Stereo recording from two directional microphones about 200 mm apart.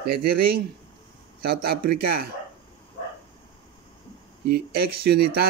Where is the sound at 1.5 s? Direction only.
50° right (ahead or behind).